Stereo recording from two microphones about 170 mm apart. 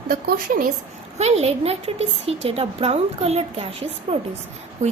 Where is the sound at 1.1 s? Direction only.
40° right (ahead or behind).